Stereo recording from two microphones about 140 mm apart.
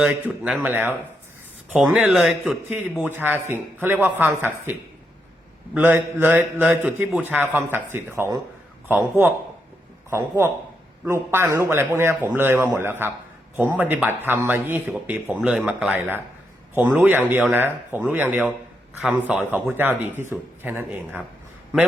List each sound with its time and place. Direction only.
0.0 s speech: 10° right (ahead or behind)
6.4 s a man's voice: 5° right (ahead or behind)